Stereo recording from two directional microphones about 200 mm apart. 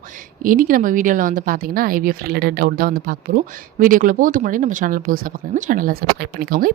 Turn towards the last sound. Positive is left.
turn(degrees=-45)  # may be behind; listen again after turning